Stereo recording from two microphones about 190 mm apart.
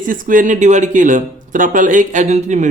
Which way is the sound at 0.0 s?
45° right (ahead or behind).